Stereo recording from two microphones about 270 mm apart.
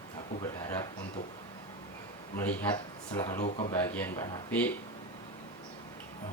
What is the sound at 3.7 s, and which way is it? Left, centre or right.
Speech, centre.